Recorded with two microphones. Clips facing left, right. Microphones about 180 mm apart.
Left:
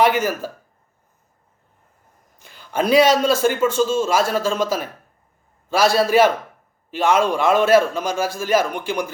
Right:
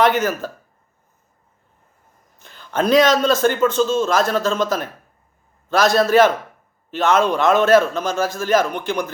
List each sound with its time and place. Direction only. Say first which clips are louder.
0.0 s a man's voice: right 1 dB; 10° left (ahead or behind)
2.4 s a man's voice: right 1 dB; 10° left (ahead or behind)